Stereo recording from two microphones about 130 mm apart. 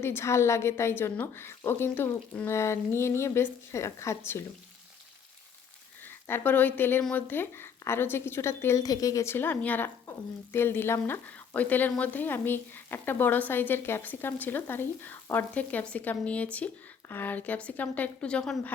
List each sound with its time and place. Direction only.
0.0 s a woman's voice: 20° left (ahead or behind)
6.0 s a woman's voice: 15° left (ahead or behind)